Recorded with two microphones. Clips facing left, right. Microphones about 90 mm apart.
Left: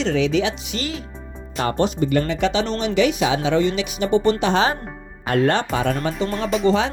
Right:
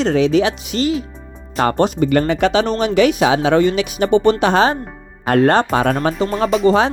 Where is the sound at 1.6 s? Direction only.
65° right (ahead or behind).